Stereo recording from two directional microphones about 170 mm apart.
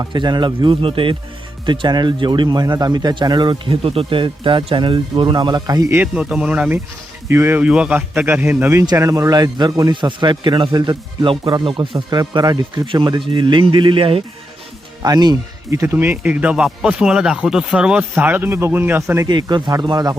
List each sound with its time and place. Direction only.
0.0 s a man's voice: 25° right (ahead or behind)
19.3 s a man's voice: 25° right (ahead or behind)